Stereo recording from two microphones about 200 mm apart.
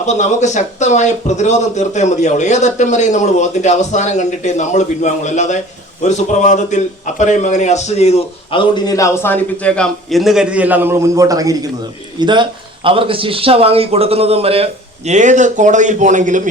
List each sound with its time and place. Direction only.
0.0 s a man's voice: 35° left (ahead or behind); by 16.5 s 40° right (ahead or behind)